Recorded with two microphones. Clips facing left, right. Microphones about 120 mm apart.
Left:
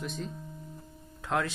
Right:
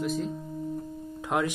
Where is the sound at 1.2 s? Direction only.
15° right (ahead or behind).